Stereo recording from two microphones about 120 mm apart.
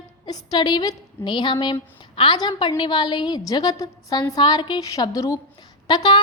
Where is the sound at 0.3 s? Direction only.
35° left (ahead or behind).